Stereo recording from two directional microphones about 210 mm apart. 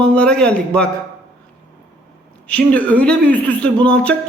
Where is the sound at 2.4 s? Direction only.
5° left (ahead or behind).